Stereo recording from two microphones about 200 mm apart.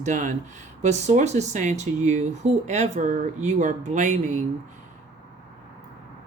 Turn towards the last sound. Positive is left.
turn(degrees=-35)  # may be behind; listen again after turning